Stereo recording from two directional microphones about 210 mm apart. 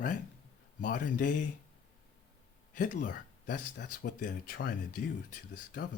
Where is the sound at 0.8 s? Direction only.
40° left (ahead or behind).